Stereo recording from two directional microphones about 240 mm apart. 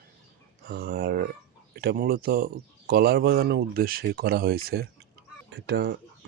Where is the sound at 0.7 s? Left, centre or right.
Right.